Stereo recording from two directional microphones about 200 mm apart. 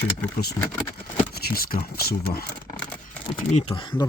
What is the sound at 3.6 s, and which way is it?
Speech, 25° left (ahead or behind).